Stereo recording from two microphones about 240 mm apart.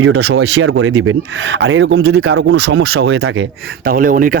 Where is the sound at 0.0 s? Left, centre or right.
Right.